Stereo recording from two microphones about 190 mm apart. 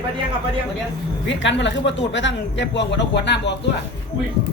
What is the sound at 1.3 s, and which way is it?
Speech, 70° left (ahead or behind).